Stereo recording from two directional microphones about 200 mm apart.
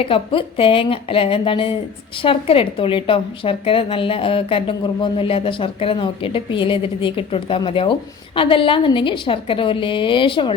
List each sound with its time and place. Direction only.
0.0 s a woman's voice: 25° left (ahead or behind)